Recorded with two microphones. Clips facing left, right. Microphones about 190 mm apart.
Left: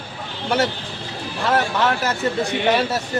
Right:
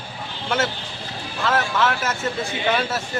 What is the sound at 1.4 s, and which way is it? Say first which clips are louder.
Speech: left 2 dB; 35° left (ahead or behind).